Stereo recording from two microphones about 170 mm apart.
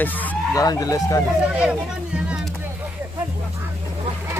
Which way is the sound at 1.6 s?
5° right (ahead or behind).